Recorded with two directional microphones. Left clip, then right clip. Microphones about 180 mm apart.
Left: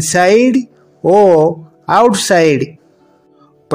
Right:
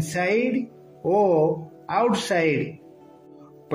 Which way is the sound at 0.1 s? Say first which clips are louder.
Left 14 dB; 40° left (ahead or behind).